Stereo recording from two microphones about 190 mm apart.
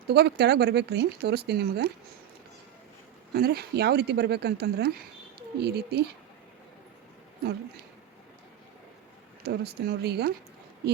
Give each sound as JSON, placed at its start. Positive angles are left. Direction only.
{"t": 0.1, "sound": "speech", "side_deg": -60}
{"t": 3.3, "sound": "speech", "side_deg": -55}
{"t": 9.4, "sound": "speech", "side_deg": -60}